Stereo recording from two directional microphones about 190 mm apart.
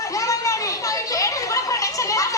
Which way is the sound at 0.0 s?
15° left (ahead or behind).